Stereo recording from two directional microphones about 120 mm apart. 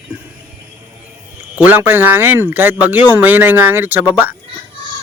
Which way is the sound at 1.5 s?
15° right (ahead or behind).